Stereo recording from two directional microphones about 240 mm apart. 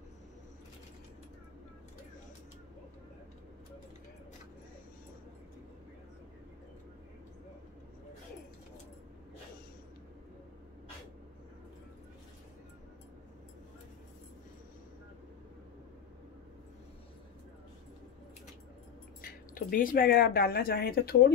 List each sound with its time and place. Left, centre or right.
19.2 s speech: left